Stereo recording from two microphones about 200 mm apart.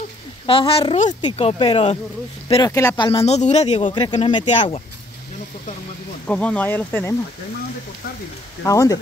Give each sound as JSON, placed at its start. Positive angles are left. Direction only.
{"t": 0.5, "sound": "speech", "side_deg": 25}
{"t": 3.9, "sound": "speech", "side_deg": 20}
{"t": 6.2, "sound": "speech", "side_deg": 5}
{"t": 8.6, "sound": "speech", "side_deg": 15}